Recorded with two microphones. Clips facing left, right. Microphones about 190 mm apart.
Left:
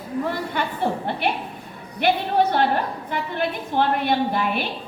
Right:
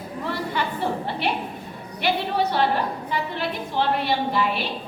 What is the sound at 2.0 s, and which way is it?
A woman's voice, 50° left (ahead or behind).